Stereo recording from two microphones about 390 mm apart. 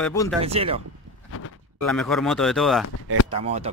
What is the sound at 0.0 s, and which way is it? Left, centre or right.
Speech, centre.